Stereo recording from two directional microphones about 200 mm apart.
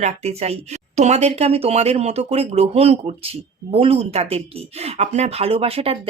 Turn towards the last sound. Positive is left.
turn(degrees=-30)  # may be behind; listen again after turning